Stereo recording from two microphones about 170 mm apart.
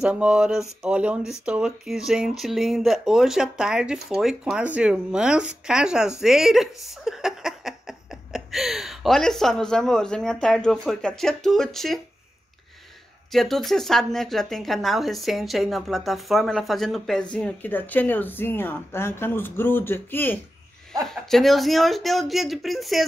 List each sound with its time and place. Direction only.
0.0 s a woman's voice: 5° right (ahead or behind)
13.3 s a woman's voice: centre (ahead or behind)
20.9 s a woman's voice: centre (ahead or behind)